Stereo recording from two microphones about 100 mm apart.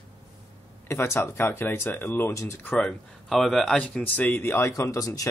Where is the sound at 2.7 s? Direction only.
5° left (ahead or behind).